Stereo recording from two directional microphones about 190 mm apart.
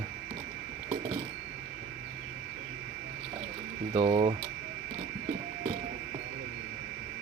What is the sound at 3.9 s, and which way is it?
Speech, 30° right (ahead or behind).